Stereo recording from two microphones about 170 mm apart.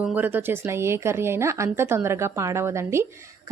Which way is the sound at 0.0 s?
10° right (ahead or behind).